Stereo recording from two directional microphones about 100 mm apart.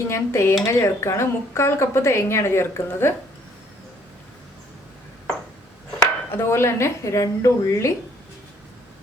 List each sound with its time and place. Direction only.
0.1 s speech: 25° left (ahead or behind)
6.3 s speech: 25° left (ahead or behind)